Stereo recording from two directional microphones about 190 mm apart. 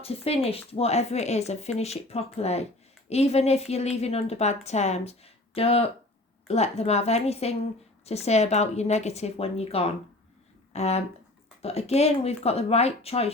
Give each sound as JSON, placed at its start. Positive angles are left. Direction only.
{"t": 0.0, "sound": "a woman's voice", "side_deg": 30}